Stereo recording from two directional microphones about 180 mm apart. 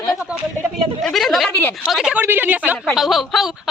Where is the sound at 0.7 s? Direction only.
Centre (ahead or behind).